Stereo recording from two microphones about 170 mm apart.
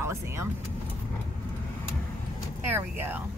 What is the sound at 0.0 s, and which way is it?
Vehicle, 15° right (ahead or behind).